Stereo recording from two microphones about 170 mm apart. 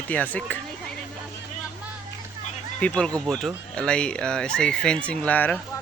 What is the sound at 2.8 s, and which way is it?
Speech, 5° left (ahead or behind).